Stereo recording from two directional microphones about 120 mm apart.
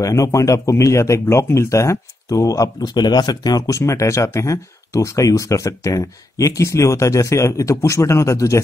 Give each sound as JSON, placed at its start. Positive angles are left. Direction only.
{"t": 0.0, "sound": "speech", "side_deg": 25}